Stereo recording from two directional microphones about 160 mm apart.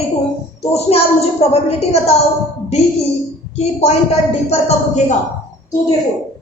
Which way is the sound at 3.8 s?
40° left (ahead or behind).